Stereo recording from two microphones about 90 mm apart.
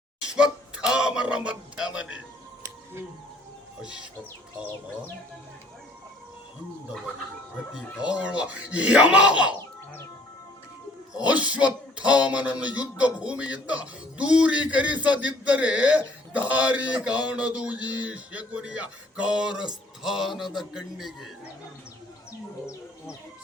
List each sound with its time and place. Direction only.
0.3 s speech: 10° right (ahead or behind)
3.8 s speech: 10° right (ahead or behind)
7.7 s speech: 10° right (ahead or behind)
9.6 s music: 30° left (ahead or behind)
11.3 s speech: 15° right (ahead or behind)